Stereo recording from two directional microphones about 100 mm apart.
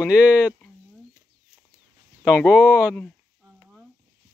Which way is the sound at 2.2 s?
10° right (ahead or behind).